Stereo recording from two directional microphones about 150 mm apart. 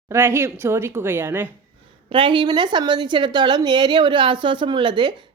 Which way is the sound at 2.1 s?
35° right (ahead or behind).